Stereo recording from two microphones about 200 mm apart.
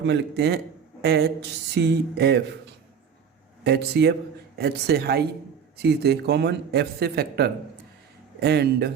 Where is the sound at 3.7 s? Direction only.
55° right (ahead or behind).